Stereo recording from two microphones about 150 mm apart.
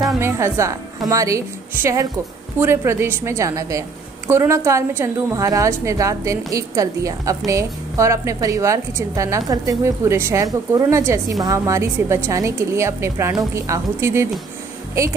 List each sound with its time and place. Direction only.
0.0 s a woman's voice: 20° right (ahead or behind)